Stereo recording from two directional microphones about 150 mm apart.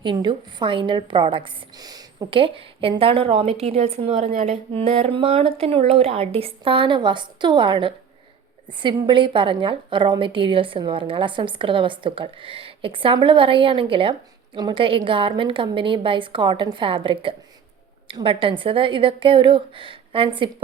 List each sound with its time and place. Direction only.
0.0 s a woman's voice: 30° right (ahead or behind)